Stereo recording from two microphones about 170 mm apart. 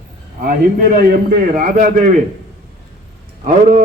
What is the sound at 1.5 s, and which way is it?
Speech, 55° right (ahead or behind).